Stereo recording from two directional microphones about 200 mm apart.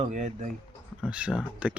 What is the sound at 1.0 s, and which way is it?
Speech, 5° right (ahead or behind).